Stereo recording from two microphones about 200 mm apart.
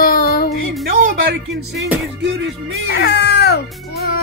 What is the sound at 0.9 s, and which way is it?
Speech, 45° right (ahead or behind).